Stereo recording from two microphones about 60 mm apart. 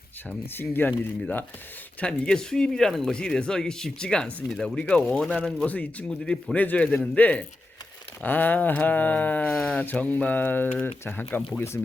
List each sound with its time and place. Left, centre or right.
0.5 s speech: left
2.0 s speech: centre
6.1 s speech: centre
11.0 s speech: left